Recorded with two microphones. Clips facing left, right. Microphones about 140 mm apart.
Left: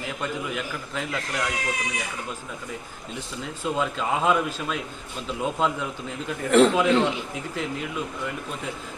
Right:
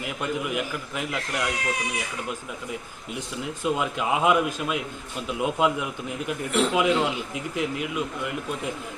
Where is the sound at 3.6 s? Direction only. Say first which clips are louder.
Even; 10° right (ahead or behind).